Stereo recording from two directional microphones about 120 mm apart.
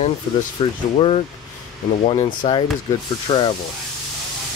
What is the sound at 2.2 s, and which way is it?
Speech, 40° left (ahead or behind).